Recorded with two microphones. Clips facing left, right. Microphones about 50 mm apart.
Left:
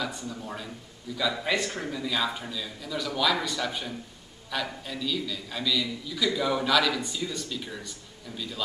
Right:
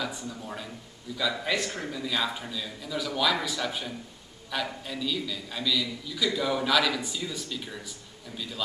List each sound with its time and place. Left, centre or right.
0.0 s a man's voice: centre